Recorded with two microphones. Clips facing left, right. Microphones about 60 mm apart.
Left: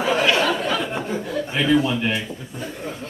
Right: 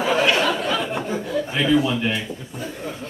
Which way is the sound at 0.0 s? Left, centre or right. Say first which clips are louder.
Even; centre.